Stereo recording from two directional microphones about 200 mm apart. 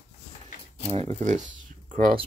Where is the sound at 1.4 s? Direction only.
40° right (ahead or behind).